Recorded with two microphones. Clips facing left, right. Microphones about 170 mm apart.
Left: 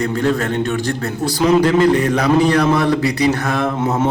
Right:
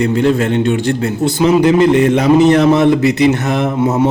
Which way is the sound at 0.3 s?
25° right (ahead or behind).